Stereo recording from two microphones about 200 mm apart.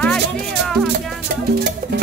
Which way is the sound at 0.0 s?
5° left (ahead or behind).